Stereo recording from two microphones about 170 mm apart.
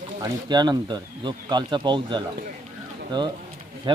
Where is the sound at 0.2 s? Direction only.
25° right (ahead or behind).